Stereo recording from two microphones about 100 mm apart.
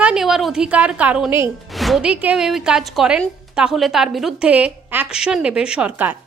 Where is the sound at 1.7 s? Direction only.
Centre (ahead or behind).